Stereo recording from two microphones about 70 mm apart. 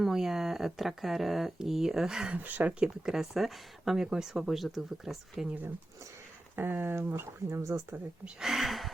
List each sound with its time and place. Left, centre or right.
0.0 s speech: centre
2.3 s speech: right; by 5.5 s centre
6.6 s speech: right
8.2 s speech: centre